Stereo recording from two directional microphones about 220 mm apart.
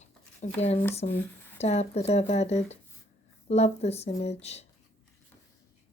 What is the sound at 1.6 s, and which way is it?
Speech, 30° left (ahead or behind).